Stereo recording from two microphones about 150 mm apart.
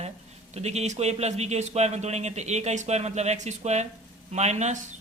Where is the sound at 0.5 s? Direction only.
45° right (ahead or behind).